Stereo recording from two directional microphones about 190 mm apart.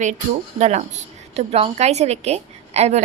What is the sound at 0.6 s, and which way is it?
A woman's voice, 40° right (ahead or behind).